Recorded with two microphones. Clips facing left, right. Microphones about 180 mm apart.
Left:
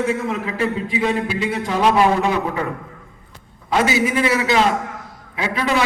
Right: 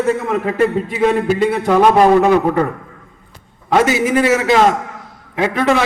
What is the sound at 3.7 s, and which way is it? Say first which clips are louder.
A man's voice: right 4 dB; 50° right (ahead or behind).